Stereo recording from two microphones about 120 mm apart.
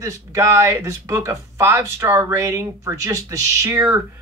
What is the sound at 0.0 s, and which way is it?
Speech, 25° right (ahead or behind).